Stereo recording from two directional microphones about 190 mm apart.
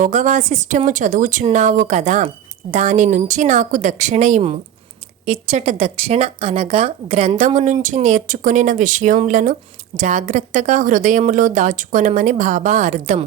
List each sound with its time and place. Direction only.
0.0 s speech: 40° right (ahead or behind)